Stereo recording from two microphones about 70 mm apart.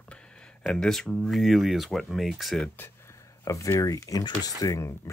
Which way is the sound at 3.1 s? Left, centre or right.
Left.